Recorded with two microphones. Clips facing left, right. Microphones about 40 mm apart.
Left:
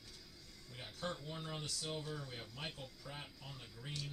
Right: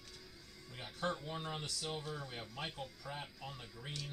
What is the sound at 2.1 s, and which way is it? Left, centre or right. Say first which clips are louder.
Speech: right 2 dB; right.